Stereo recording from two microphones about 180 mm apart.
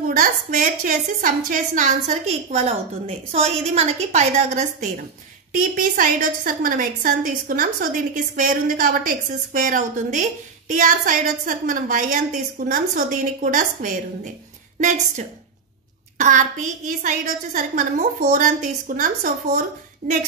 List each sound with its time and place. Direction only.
0.1 s a woman's voice: 50° right (ahead or behind)